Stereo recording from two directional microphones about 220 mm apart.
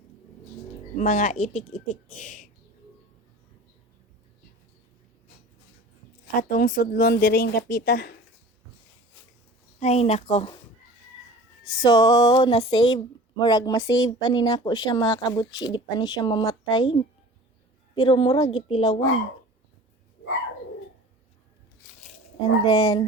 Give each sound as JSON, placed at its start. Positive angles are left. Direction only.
{"t": 0.9, "sound": "speech", "side_deg": 35}
{"t": 6.5, "sound": "speech", "side_deg": 40}
{"t": 9.8, "sound": "speech", "side_deg": 30}
{"t": 11.6, "sound": "speech", "side_deg": 20}
{"t": 22.6, "sound": "speech", "side_deg": 20}